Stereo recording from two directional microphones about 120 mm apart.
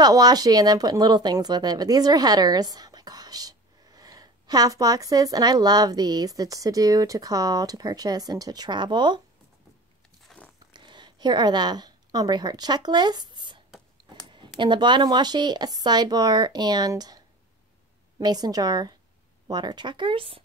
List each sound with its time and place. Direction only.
0.0 s speech: 35° right (ahead or behind)
10.7 s a woman's voice: 40° right (ahead or behind)
14.6 s speech: 40° right (ahead or behind)
18.2 s speech: 35° right (ahead or behind); by 20.4 s 50° right (ahead or behind)